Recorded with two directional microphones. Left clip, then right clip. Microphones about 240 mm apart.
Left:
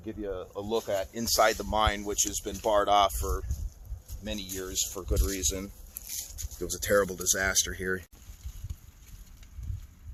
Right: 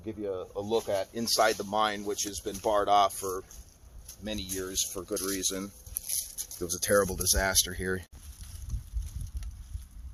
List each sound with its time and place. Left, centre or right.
0.0 s speech: centre
4.2 s speech: centre
6.1 s a sound: right
6.6 s speech: centre